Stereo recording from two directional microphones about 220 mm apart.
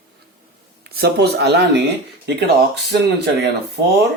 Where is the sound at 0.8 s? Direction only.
45° right (ahead or behind).